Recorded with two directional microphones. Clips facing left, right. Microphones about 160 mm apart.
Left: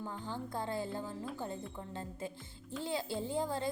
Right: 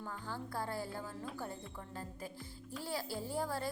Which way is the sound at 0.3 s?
20° left (ahead or behind).